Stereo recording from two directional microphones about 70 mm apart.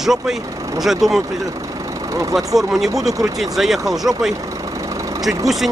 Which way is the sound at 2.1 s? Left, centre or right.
Right.